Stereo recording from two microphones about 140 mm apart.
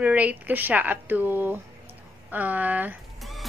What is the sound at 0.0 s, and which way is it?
Speech, 10° right (ahead or behind).